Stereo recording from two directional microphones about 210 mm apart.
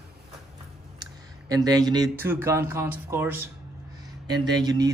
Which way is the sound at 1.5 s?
20° right (ahead or behind).